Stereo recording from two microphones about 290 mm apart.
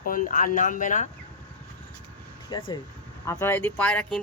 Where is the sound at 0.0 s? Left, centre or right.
Left.